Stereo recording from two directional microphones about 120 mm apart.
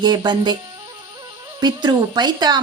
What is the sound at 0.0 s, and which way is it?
Speech, 40° right (ahead or behind).